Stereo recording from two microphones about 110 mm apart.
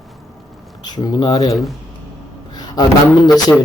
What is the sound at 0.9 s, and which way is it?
Speech, 40° left (ahead or behind).